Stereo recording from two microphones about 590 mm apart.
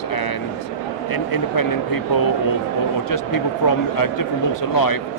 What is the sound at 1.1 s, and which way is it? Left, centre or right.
Speech, left.